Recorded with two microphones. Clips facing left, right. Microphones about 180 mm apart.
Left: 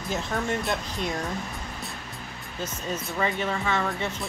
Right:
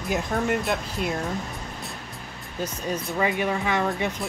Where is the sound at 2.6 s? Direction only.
10° right (ahead or behind).